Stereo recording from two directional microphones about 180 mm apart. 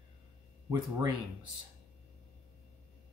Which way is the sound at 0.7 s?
20° right (ahead or behind).